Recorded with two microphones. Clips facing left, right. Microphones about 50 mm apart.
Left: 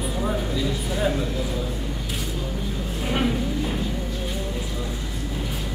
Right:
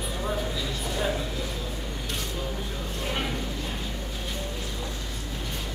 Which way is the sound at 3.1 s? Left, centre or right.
Centre.